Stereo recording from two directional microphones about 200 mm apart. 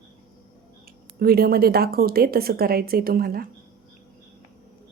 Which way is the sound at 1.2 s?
50° right (ahead or behind).